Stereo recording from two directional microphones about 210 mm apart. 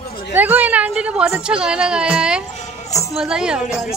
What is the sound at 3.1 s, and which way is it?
Speech, 5° right (ahead or behind).